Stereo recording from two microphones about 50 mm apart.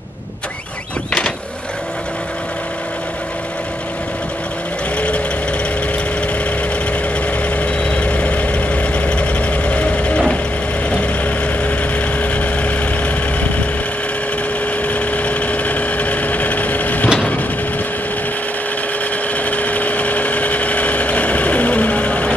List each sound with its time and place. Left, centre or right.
4.9 s vehicle: left
7.4 s vehicle: left
14.9 s vehicle: left
19.3 s engine: left